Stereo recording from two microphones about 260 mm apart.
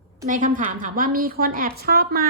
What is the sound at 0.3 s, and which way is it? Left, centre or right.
A woman's voice, right.